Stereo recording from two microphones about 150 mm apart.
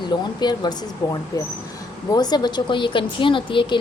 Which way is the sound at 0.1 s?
30° left (ahead or behind).